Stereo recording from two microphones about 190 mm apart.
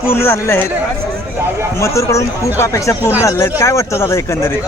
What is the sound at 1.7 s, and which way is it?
Speech, 15° left (ahead or behind).